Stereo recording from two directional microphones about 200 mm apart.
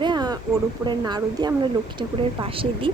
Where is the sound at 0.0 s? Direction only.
20° right (ahead or behind).